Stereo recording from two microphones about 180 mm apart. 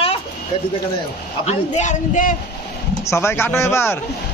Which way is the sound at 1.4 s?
40° left (ahead or behind).